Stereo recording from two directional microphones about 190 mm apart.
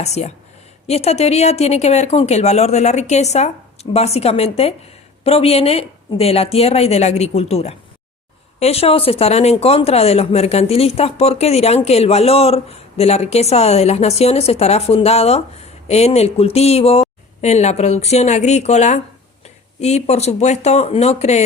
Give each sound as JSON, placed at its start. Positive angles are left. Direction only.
{"t": 0.0, "sound": "a woman's voice", "side_deg": 35}